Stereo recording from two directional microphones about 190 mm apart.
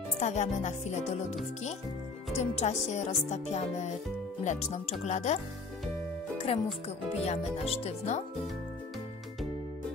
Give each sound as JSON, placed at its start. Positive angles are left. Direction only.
{"t": 0.2, "sound": "music", "side_deg": 35}
{"t": 2.3, "sound": "music", "side_deg": 35}
{"t": 6.5, "sound": "music", "side_deg": 30}